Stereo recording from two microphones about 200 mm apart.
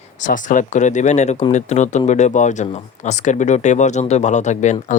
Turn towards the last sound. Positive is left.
turn(degrees=35)  # may be behind; listen again after turning